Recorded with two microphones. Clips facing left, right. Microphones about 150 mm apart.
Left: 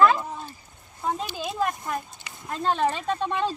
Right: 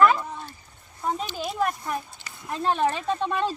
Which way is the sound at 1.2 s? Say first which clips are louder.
Right 1 dB; 20° left (ahead or behind).